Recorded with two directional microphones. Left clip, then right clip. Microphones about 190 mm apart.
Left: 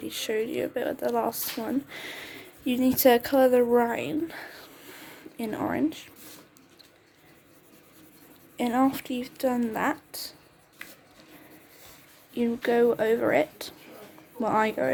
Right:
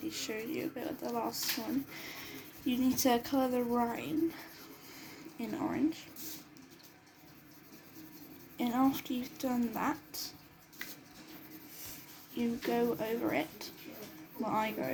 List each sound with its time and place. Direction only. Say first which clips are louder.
0.0 s speech: left 10 dB; 50° left (ahead or behind)
8.5 s speech: left 7 dB; 45° left (ahead or behind)
12.4 s speech: left 10 dB; 55° left (ahead or behind)